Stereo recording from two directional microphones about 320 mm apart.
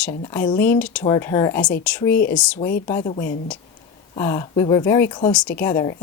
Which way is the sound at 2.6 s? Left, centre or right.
Centre.